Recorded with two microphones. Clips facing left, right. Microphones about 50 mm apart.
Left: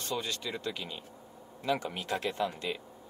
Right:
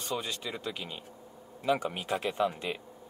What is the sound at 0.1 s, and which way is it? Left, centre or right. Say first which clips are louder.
Speech: even; centre.